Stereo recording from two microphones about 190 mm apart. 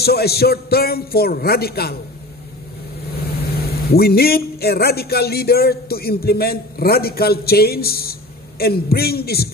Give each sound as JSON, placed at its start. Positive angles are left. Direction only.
{"t": 0.0, "sound": "a man's voice", "side_deg": 55}
{"t": 3.5, "sound": "a man's voice", "side_deg": 55}